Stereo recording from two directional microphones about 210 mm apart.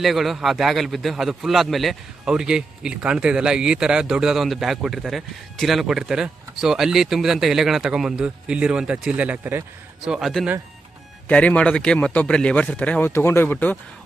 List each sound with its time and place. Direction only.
0.0 s a man's voice: centre (ahead or behind)